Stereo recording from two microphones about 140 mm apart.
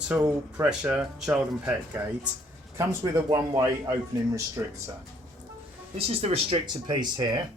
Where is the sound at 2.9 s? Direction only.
25° right (ahead or behind).